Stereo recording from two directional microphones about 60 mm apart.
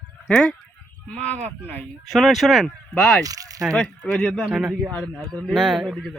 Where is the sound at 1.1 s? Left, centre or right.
Left.